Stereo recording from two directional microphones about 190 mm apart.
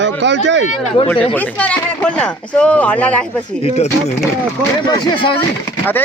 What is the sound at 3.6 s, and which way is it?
Speech, 35° left (ahead or behind).